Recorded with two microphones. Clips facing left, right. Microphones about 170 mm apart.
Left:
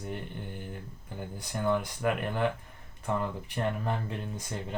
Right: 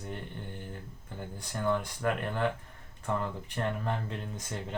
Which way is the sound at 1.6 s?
10° left (ahead or behind).